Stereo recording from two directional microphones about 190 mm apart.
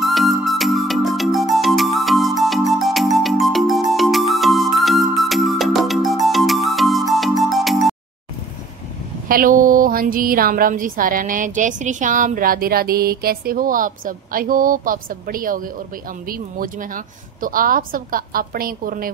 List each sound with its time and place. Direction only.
0.0 s music: centre (ahead or behind)
9.3 s a woman's voice: 45° right (ahead or behind)